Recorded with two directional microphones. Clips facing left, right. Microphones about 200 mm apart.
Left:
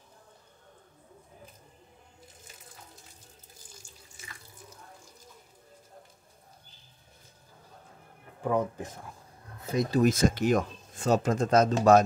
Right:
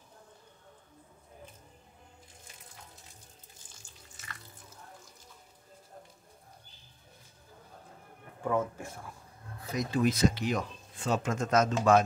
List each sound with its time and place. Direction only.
8.5 s speech: 20° left (ahead or behind)
9.6 s speech: 30° left (ahead or behind)